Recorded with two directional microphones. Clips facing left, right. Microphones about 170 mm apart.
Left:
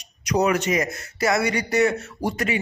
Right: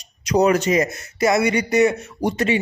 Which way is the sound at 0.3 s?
35° right (ahead or behind).